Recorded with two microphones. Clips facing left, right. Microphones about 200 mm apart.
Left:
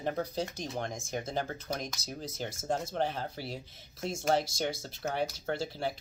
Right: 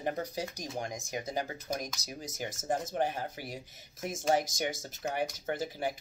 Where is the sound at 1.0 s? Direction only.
15° right (ahead or behind).